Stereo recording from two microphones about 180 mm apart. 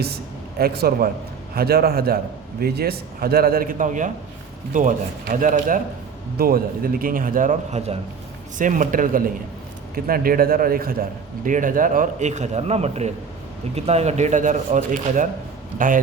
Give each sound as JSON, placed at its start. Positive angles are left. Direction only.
{"t": 0.6, "sound": "a man's voice", "side_deg": -60}